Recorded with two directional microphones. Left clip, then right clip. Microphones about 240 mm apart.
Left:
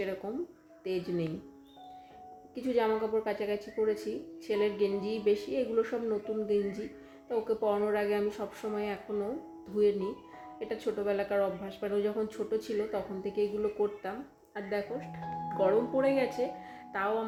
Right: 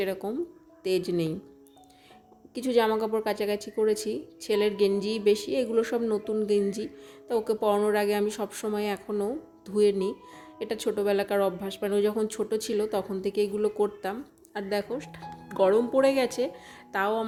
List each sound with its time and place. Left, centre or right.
0.2 s speech: right
2.6 s speech: right